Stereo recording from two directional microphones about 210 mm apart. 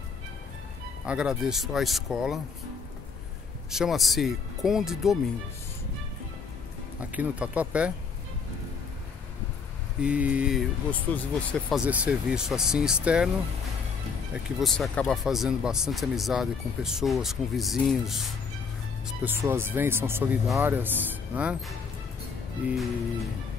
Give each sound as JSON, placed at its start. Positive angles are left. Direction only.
{"t": 1.0, "sound": "speech", "side_deg": -5}
{"t": 3.7, "sound": "speech", "side_deg": 0}
{"t": 7.0, "sound": "speech", "side_deg": -5}
{"t": 10.0, "sound": "speech", "side_deg": -5}
{"t": 11.7, "sound": "speech", "side_deg": -5}
{"t": 14.3, "sound": "speech", "side_deg": 0}
{"t": 19.2, "sound": "speech", "side_deg": -10}